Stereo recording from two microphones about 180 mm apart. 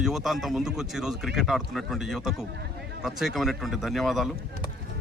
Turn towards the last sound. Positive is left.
turn(degrees=0)  # may be behind; listen again after turning